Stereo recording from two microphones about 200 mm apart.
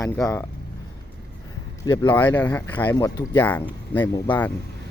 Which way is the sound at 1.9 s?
15° left (ahead or behind).